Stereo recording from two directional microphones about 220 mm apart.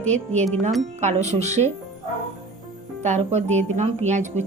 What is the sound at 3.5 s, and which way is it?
Speech, 10° left (ahead or behind).